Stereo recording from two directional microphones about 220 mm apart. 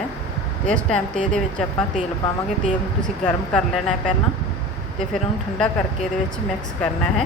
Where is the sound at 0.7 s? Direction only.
5° left (ahead or behind).